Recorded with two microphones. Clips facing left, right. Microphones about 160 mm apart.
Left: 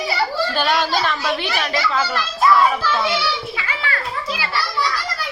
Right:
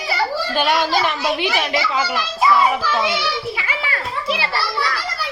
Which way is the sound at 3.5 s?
20° right (ahead or behind).